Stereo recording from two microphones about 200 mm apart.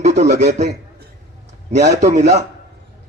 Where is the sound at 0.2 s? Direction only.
35° right (ahead or behind).